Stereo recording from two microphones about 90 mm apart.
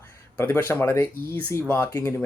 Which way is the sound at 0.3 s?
25° left (ahead or behind).